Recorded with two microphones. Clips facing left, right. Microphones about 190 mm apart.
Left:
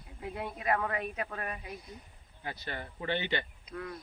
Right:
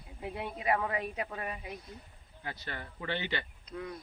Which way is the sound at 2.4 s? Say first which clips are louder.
Left 2 dB; 20° left (ahead or behind).